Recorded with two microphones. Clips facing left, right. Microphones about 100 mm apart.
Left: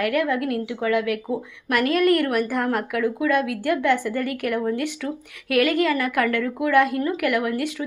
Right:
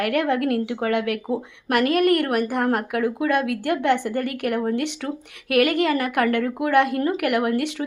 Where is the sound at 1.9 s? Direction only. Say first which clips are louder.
Left 1 dB; 50° right (ahead or behind).